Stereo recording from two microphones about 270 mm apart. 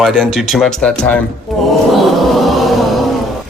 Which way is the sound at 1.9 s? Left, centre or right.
Centre.